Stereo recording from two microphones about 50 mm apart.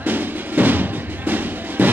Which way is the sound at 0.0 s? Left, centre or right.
Right.